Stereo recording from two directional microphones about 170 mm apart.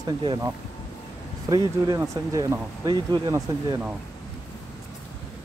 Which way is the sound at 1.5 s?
15° right (ahead or behind).